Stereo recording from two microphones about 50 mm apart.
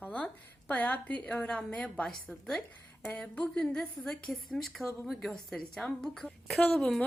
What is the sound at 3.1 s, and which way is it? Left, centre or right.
Speech, left.